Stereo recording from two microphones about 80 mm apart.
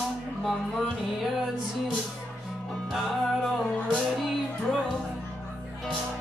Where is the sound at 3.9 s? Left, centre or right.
Centre.